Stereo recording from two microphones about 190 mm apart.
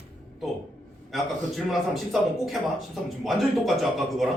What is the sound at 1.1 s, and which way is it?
A man's voice, centre (ahead or behind).